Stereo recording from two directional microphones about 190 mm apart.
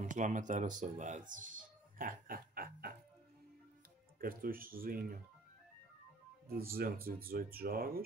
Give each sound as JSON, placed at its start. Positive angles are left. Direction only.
{"t": 0.0, "sound": "speech", "side_deg": -40}
{"t": 4.2, "sound": "speech", "side_deg": -50}
{"t": 6.4, "sound": "speech", "side_deg": -55}